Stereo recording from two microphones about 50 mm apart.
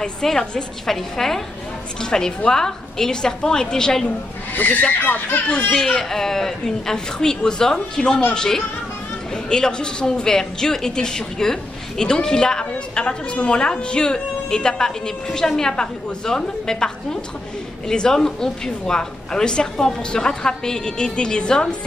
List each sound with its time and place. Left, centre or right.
0.0 s a woman's voice: centre
4.6 s speech: left
5.5 s a woman's voice: centre